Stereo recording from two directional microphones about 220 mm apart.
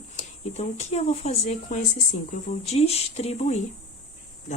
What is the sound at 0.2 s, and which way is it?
Speech, 30° left (ahead or behind).